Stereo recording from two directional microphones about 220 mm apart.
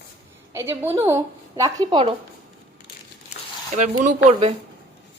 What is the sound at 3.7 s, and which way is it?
Speech, 35° right (ahead or behind).